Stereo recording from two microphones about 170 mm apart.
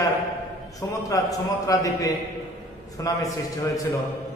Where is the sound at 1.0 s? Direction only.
20° left (ahead or behind).